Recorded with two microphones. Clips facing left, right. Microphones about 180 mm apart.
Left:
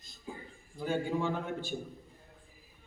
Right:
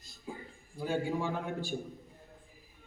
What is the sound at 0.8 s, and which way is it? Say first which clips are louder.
Speech: left 1 dB; 10° right (ahead or behind).